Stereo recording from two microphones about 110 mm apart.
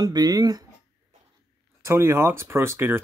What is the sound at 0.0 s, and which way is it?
Speech, 40° right (ahead or behind).